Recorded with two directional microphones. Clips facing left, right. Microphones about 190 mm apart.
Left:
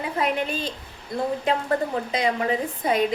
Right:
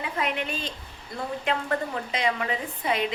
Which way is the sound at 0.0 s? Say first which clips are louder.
Left 4 dB; 35° left (ahead or behind).